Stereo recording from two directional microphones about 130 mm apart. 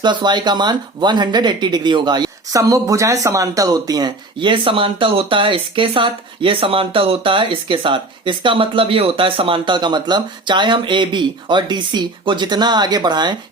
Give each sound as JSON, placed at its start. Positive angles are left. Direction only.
{"t": 0.0, "sound": "speech", "side_deg": -35}